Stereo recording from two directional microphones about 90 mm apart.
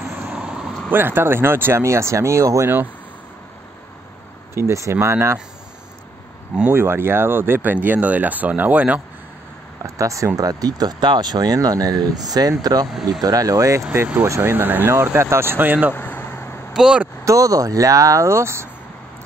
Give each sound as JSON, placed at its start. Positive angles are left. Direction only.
{"t": 0.3, "sound": "vehicle", "side_deg": -10}
{"t": 0.9, "sound": "speech", "side_deg": -25}
{"t": 4.6, "sound": "speech", "side_deg": -30}
{"t": 6.7, "sound": "speech", "side_deg": -25}
{"t": 9.8, "sound": "speech", "side_deg": -35}
{"t": 15.9, "sound": "vehicle", "side_deg": 20}
{"t": 16.7, "sound": "speech", "side_deg": -5}
{"t": 17.2, "sound": "speech", "side_deg": -40}